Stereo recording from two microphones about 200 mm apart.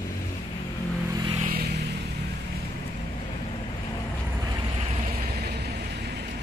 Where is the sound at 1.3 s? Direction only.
45° right (ahead or behind).